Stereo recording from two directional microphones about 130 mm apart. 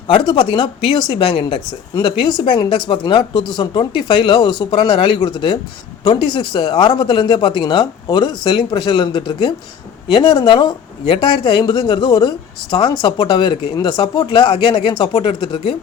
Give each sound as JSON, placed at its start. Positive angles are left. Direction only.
{"t": 0.1, "sound": "speech", "side_deg": 40}